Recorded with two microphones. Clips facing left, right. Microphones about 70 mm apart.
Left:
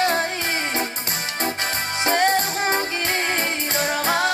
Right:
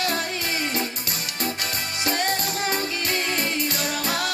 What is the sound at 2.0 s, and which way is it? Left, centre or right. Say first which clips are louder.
Music: left 6 dB; left.